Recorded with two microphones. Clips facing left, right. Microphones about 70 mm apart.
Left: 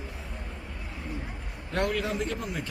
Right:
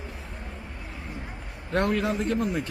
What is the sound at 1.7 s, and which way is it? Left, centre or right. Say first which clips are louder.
Speech: right 3 dB; right.